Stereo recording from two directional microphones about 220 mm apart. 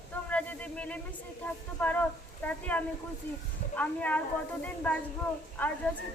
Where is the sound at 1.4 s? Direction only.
5° left (ahead or behind).